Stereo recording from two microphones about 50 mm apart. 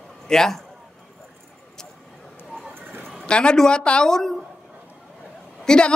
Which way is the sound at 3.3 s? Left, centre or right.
Centre.